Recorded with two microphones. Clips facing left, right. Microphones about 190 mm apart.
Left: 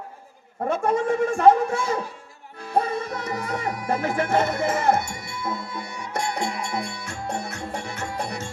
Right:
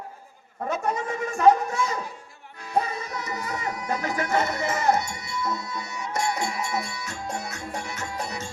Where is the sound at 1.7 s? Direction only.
30° left (ahead or behind).